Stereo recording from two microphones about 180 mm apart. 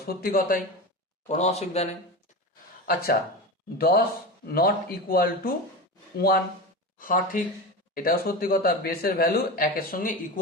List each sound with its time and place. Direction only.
0.0 s speech: 55° left (ahead or behind)
1.3 s a man's voice: 35° left (ahead or behind)
2.8 s speech: 55° left (ahead or behind)